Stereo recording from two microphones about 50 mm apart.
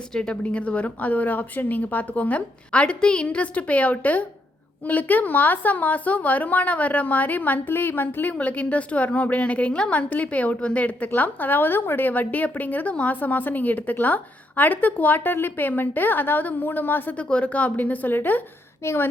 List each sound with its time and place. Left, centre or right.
0.1 s a woman's voice: centre; by 17.2 s left
17.2 s a woman's voice: left
18.8 s a woman's voice: left